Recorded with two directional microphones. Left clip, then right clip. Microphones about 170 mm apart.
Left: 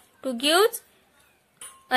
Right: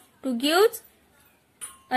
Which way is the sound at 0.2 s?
25° left (ahead or behind).